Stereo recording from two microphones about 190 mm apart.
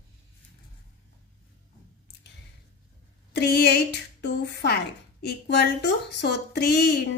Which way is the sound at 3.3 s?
60° left (ahead or behind).